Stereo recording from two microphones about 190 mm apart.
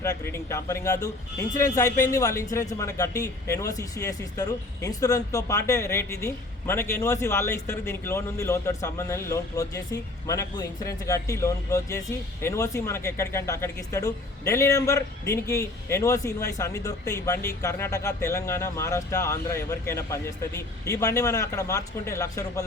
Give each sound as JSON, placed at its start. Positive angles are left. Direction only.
{"t": 0.0, "sound": "speech", "side_deg": 15}